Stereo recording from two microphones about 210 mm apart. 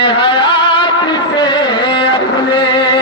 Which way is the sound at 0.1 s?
25° left (ahead or behind).